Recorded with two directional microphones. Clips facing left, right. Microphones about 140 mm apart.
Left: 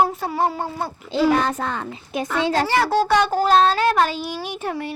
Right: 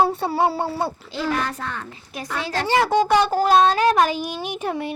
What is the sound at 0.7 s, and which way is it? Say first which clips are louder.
Speech: right 3 dB; 35° right (ahead or behind).